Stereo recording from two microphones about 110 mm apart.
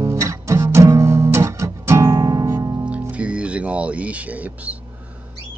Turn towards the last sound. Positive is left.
turn(degrees=-15)  # may be behind; listen again after turning